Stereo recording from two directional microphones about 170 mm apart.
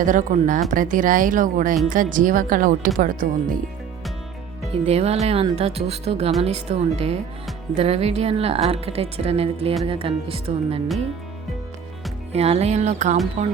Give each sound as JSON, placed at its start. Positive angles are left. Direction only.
{"t": 0.0, "sound": "speech", "side_deg": -50}
{"t": 4.7, "sound": "a woman's voice", "side_deg": -35}
{"t": 12.3, "sound": "a woman's voice", "side_deg": -40}